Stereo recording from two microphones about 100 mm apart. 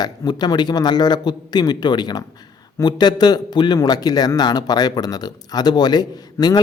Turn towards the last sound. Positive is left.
turn(degrees=40)  # may be behind; listen again after turning